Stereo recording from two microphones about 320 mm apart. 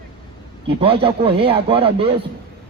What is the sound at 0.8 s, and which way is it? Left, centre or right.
Speech, centre.